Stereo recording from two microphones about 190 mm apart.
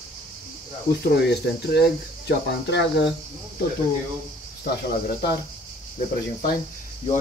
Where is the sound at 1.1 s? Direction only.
60° left (ahead or behind).